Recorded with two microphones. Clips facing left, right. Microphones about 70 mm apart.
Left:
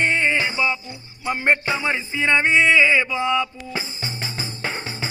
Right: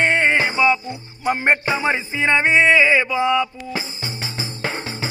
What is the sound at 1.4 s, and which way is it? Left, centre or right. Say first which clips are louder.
Music: right 1 dB; centre.